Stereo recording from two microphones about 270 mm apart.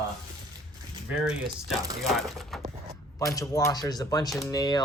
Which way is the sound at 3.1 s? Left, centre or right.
Centre.